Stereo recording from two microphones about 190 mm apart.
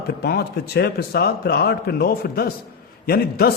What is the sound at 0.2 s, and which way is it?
A man's voice, 55° left (ahead or behind).